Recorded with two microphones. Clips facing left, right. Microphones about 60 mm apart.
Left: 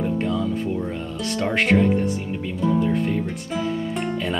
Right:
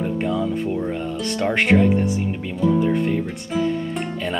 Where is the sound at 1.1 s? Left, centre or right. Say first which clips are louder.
Even; centre.